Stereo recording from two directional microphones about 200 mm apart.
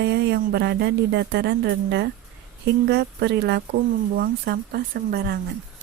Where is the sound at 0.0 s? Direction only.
55° right (ahead or behind).